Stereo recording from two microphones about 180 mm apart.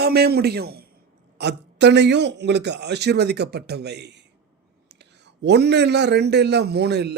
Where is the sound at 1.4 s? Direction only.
70° right (ahead or behind).